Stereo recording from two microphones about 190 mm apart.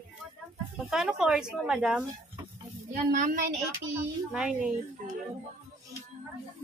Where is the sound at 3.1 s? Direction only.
45° right (ahead or behind).